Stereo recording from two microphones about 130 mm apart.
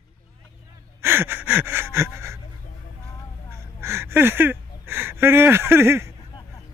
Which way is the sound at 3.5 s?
20° right (ahead or behind).